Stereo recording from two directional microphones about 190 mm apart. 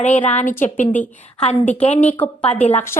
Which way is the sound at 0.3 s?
40° left (ahead or behind).